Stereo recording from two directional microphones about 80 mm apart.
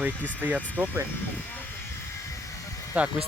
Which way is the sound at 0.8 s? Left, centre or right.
Right.